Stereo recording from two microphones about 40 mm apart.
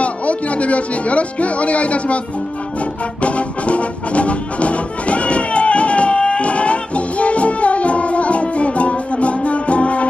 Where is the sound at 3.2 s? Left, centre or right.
Left.